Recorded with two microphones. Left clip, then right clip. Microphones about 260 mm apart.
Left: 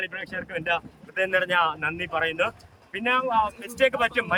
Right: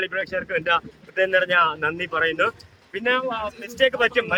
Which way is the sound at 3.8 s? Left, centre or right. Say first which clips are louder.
Right 3 dB; centre.